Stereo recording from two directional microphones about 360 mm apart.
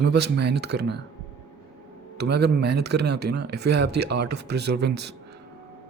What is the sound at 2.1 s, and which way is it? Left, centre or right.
Speech, right.